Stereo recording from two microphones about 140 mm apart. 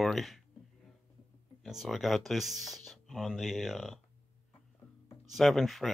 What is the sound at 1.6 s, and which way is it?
Speech, centre (ahead or behind).